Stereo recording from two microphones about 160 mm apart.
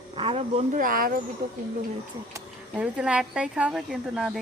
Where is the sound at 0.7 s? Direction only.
60° right (ahead or behind).